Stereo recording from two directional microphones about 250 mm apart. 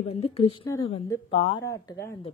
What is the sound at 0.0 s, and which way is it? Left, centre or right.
A woman's voice, left.